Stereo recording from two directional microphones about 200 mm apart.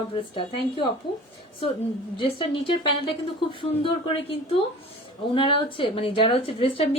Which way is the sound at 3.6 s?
25° left (ahead or behind).